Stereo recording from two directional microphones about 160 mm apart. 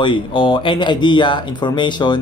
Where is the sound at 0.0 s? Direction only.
30° left (ahead or behind).